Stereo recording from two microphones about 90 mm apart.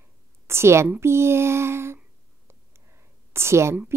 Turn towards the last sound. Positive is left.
turn(degrees=-30)  # may be behind; listen again after turning